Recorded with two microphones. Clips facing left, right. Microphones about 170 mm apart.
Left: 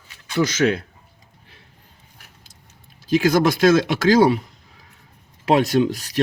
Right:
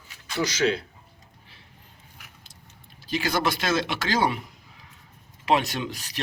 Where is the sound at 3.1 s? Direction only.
45° left (ahead or behind).